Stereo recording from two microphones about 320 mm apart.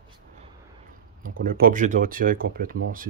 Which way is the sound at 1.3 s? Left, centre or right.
Right.